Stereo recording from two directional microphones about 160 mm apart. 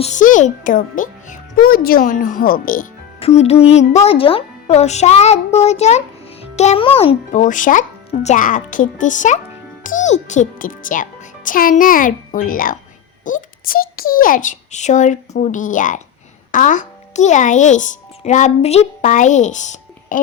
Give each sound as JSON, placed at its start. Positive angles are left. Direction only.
{"t": 0.0, "sound": "a child's voice", "side_deg": 50}
{"t": 3.2, "sound": "a child's voice", "side_deg": 40}
{"t": 7.3, "sound": "a child's voice", "side_deg": 55}